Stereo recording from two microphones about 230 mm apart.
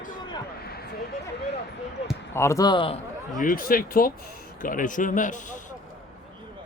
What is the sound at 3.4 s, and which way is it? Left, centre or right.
Speech, left.